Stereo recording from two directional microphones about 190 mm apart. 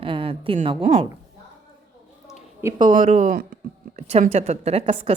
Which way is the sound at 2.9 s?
40° right (ahead or behind).